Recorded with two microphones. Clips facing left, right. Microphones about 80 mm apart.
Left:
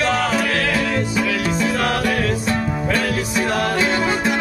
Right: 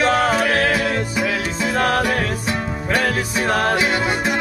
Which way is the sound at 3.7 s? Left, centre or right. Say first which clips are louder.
Even; centre.